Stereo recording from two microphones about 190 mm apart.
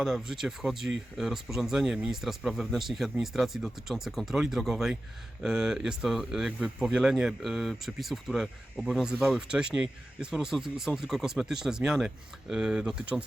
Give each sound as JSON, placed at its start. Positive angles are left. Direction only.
{"t": 0.0, "sound": "speech", "side_deg": 0}